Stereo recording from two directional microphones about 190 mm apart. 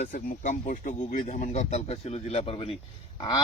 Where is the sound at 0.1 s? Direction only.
45° left (ahead or behind).